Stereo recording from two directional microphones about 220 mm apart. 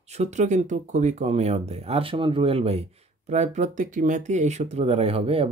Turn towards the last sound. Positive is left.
turn(degrees=-25)  # may be behind; listen again after turning